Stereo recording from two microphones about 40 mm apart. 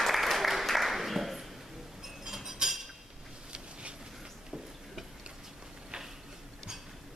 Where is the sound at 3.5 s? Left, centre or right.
Right.